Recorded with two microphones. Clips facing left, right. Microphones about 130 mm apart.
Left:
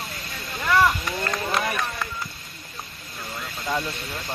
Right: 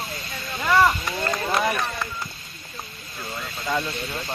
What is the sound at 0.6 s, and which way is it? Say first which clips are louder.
Run: right 1 dB; centre (ahead or behind).